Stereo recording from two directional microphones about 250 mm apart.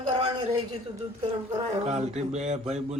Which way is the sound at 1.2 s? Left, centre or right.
Right.